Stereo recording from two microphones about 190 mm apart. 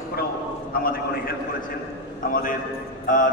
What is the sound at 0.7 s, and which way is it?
Speech, 50° left (ahead or behind).